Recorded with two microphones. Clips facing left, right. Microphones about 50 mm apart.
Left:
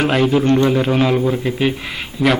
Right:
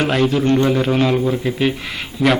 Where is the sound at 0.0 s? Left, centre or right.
Centre.